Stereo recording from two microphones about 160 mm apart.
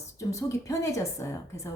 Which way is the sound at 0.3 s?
20° left (ahead or behind).